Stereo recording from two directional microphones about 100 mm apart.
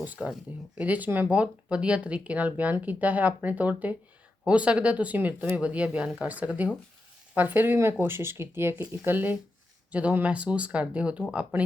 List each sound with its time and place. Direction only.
0.0 s speech: 15° right (ahead or behind)